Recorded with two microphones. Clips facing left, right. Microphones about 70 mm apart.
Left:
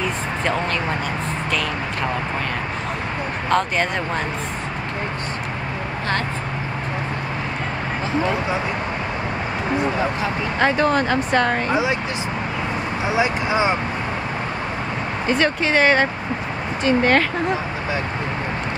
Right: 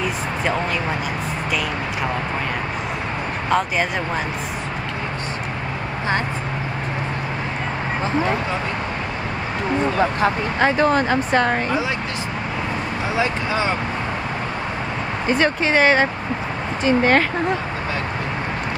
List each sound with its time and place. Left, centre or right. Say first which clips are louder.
3.4 s speech: even; centre
10.6 s speech: right 1 dB; centre
13.1 s speech: left 2 dB; centre
15.2 s speech: right 1 dB; centre